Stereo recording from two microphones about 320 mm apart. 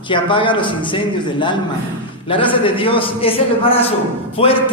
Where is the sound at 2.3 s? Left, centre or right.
Centre.